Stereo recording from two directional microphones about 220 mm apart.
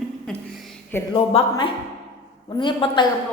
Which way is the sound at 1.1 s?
25° left (ahead or behind).